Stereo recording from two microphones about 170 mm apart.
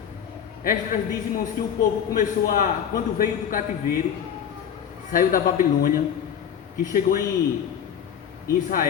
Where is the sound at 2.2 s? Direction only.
55° left (ahead or behind).